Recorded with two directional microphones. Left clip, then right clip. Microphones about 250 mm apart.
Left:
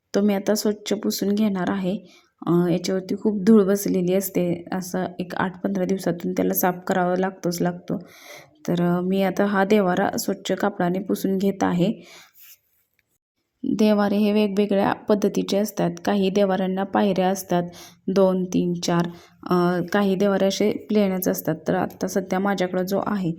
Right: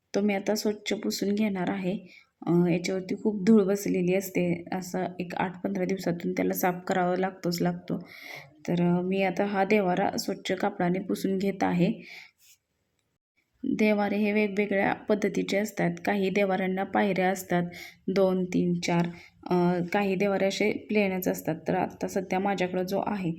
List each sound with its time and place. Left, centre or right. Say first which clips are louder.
0.1 s a woman's voice: left 6 dB; centre
13.7 s a woman's voice: left 5 dB; centre
19.7 s speech: left 5 dB; centre
20.1 s a woman's voice: left 7 dB; centre
21.3 s speech: left 6 dB; centre
21.7 s a woman's voice: left 4 dB; centre